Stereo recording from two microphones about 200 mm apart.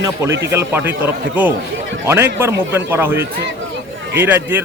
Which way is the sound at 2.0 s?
15° right (ahead or behind).